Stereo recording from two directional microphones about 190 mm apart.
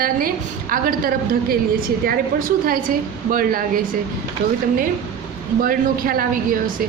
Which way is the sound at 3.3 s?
50° right (ahead or behind).